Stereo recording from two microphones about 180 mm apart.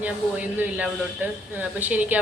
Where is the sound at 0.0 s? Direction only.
10° right (ahead or behind).